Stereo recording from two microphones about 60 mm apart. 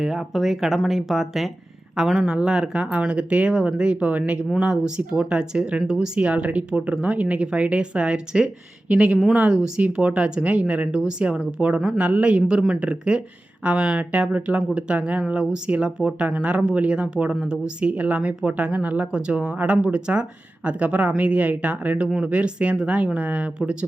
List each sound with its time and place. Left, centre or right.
0.0 s speech: centre
2.3 s speech: centre